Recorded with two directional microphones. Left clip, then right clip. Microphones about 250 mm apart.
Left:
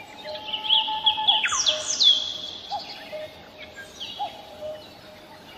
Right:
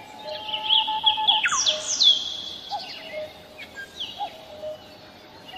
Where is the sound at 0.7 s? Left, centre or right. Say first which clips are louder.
Right 1 dB; centre.